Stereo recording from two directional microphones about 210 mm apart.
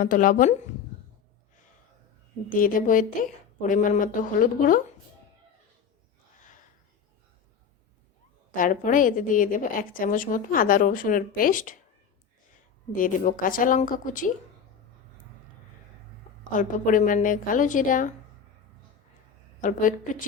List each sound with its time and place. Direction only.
0.0 s a woman's voice: 40° left (ahead or behind)
2.5 s a woman's voice: 40° left (ahead or behind)
8.5 s a woman's voice: 40° left (ahead or behind)
12.9 s a woman's voice: 40° left (ahead or behind)
16.4 s a woman's voice: 40° left (ahead or behind)
19.6 s a woman's voice: 40° left (ahead or behind)